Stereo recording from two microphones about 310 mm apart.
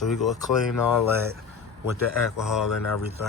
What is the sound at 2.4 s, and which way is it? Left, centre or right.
Speech, centre.